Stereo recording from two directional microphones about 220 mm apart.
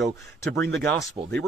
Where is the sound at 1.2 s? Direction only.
15° right (ahead or behind).